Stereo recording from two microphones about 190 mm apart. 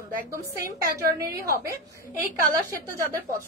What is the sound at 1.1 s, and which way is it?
Speech, 55° right (ahead or behind).